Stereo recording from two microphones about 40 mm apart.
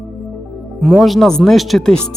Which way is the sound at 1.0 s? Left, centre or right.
Centre.